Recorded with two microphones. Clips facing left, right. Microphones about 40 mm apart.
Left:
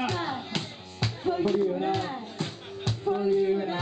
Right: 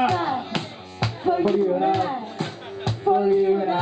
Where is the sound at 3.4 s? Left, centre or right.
Centre.